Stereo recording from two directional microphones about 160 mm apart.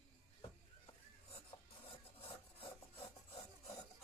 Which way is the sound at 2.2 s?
35° left (ahead or behind).